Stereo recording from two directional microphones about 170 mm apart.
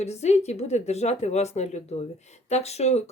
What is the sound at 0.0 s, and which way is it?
Speech, 40° left (ahead or behind).